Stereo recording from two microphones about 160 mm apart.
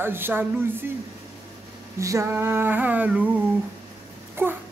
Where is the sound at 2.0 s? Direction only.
20° right (ahead or behind).